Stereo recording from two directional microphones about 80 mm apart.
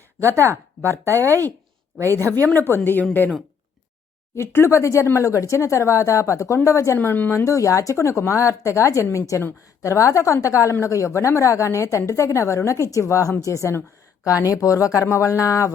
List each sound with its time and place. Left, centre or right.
0.2 s speech: right
2.3 s speech: left
4.4 s a woman's voice: left